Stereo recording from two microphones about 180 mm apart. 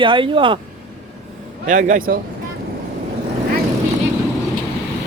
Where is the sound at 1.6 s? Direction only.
45° right (ahead or behind).